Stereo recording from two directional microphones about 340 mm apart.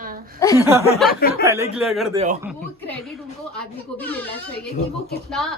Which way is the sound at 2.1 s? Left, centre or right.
Centre.